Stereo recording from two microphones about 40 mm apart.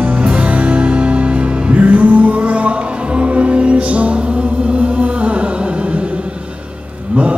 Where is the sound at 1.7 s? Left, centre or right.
Right.